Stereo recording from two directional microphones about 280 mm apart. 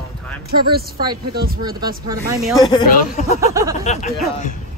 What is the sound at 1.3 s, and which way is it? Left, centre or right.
Speech, right.